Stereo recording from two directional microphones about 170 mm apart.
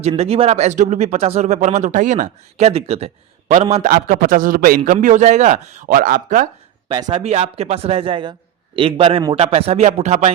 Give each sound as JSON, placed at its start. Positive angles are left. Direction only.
{"t": 0.0, "sound": "speech", "side_deg": -35}
{"t": 6.8, "sound": "speech", "side_deg": -25}
{"t": 7.1, "sound": "speech", "side_deg": -40}